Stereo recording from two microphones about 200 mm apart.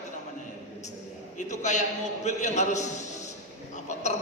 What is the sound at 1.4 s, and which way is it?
A man's voice, 35° left (ahead or behind).